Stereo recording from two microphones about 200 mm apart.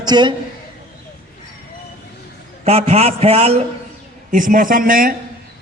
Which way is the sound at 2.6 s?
30° right (ahead or behind).